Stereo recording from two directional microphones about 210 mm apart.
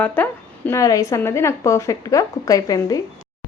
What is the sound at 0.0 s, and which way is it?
A woman's voice, 10° left (ahead or behind).